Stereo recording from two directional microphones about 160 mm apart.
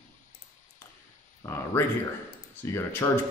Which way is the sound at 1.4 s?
15° left (ahead or behind).